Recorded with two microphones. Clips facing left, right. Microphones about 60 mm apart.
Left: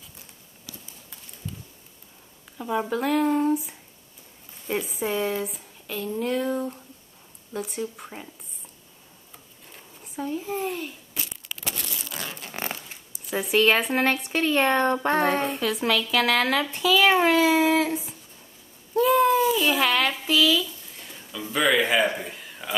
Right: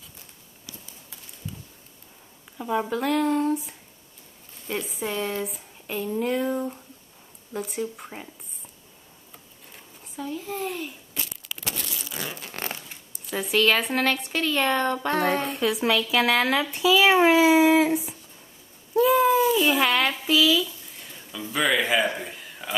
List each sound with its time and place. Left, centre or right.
2.5 s speech: centre
5.9 s speech: centre
10.1 s speech: centre
10.7 s speech: centre
11.4 s a sound: centre
12.7 s zipper: centre
13.4 s speech: centre
14.3 s speech: centre
15.1 s speech: centre
18.9 s a sound: centre